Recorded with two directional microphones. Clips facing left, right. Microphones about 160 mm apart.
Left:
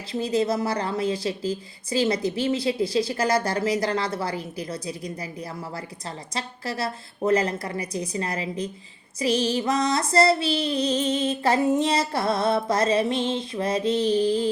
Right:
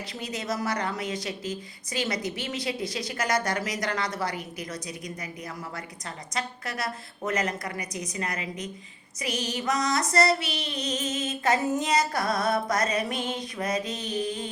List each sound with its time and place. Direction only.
0.1 s female singing: 30° left (ahead or behind)
6.3 s a woman's voice: 30° left (ahead or behind)
9.1 s female singing: 30° left (ahead or behind)